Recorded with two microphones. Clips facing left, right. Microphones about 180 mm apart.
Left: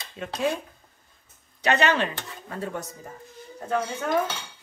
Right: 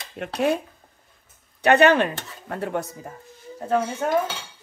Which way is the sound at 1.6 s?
55° right (ahead or behind).